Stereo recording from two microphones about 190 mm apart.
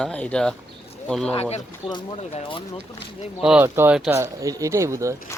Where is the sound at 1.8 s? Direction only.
25° left (ahead or behind).